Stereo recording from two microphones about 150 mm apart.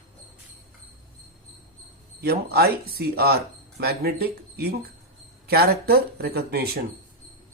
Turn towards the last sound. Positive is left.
turn(degrees=-90)